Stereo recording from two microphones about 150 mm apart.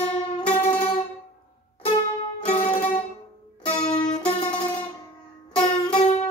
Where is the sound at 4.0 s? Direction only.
40° left (ahead or behind).